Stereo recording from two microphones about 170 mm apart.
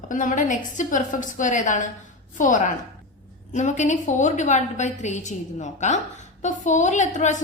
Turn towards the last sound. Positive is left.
turn(degrees=45)  # may be behind; listen again after turning